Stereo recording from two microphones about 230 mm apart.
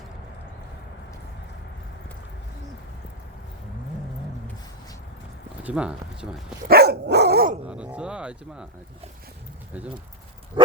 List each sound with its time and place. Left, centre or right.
5.6 s speech: centre
6.7 s dog: right
7.7 s a sound: centre